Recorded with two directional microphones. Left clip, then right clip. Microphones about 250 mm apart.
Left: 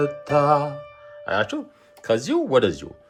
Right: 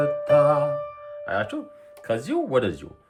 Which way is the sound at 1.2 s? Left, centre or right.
Centre.